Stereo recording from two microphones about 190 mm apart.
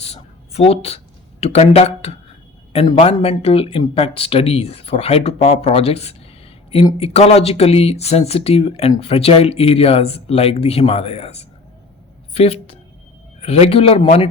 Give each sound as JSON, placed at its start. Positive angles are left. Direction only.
{"t": 0.0, "sound": "speech", "side_deg": 30}